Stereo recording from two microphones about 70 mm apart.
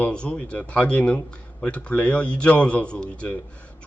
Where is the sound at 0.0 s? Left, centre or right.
Centre.